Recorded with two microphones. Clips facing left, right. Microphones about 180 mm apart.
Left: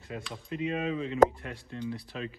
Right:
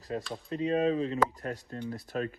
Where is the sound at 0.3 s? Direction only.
35° right (ahead or behind).